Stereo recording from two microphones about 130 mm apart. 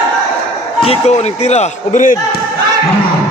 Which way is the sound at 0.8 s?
55° left (ahead or behind).